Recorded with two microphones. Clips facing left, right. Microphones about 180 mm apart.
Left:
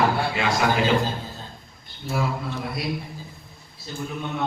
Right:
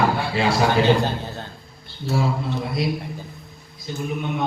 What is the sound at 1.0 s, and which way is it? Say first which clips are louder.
Speech: right 4 dB; 70° right (ahead or behind).